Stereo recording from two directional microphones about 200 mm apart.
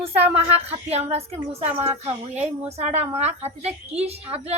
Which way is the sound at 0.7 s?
30° right (ahead or behind).